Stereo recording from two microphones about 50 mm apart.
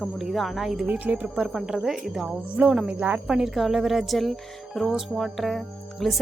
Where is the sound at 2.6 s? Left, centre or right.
Right.